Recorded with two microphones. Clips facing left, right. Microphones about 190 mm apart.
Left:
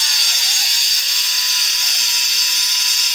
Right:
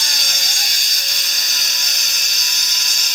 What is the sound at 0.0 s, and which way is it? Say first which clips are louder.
Ratchet: right 2 dB; 45° right (ahead or behind).